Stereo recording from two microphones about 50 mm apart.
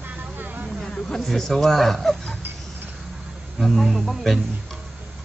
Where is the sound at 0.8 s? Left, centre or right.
Centre.